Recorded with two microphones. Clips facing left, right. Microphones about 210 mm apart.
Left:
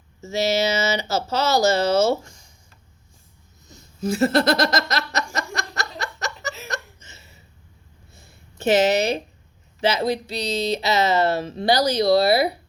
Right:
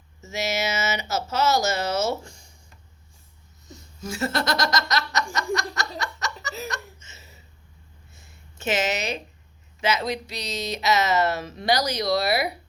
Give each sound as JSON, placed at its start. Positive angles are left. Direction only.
{"t": 0.2, "sound": "speech", "side_deg": 30}
{"t": 4.0, "sound": "speech", "side_deg": 35}
{"t": 6.0, "sound": "laughter", "side_deg": 35}
{"t": 8.1, "sound": "a sound", "side_deg": 35}
{"t": 9.8, "sound": "speech", "side_deg": 30}